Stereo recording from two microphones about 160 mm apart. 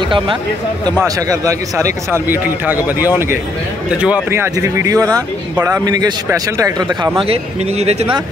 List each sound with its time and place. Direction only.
1.0 s a man's voice: 20° right (ahead or behind)
7.8 s speech: 40° right (ahead or behind)